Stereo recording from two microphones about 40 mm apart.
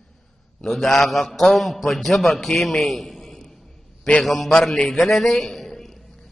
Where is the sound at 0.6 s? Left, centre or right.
Centre.